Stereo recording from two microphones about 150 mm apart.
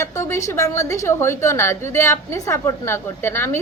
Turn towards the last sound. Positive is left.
turn(degrees=15)  # may be behind; listen again after turning